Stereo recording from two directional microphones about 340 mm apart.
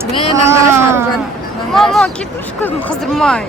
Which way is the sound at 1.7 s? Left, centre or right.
Centre.